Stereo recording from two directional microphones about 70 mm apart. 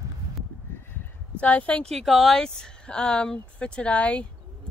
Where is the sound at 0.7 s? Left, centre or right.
Left.